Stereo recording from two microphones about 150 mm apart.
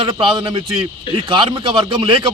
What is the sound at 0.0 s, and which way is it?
Speech, 35° right (ahead or behind).